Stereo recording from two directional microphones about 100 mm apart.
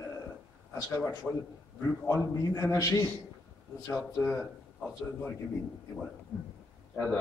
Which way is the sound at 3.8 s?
10° left (ahead or behind).